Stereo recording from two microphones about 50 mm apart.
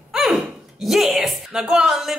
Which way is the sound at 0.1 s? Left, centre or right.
Centre.